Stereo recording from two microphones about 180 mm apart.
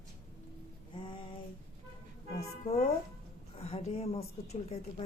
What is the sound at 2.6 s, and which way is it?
Music, 40° left (ahead or behind).